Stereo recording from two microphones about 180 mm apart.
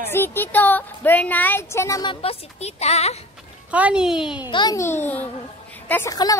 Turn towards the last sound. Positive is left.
turn(degrees=20)  # may be behind; listen again after turning